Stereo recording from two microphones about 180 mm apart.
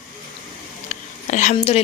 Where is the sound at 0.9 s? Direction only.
40° left (ahead or behind).